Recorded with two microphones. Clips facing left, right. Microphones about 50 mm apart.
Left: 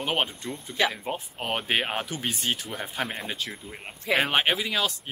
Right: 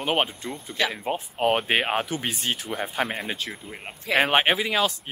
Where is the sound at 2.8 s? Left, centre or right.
Centre.